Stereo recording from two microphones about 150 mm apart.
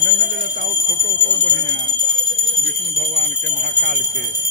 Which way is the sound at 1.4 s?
85° right.